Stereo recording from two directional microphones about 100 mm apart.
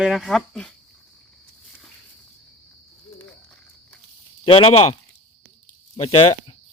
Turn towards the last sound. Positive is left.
turn(degrees=65)  # may be behind; listen again after turning